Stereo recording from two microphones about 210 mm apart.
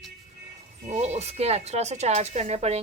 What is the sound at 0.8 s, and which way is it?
Speech, 35° right (ahead or behind).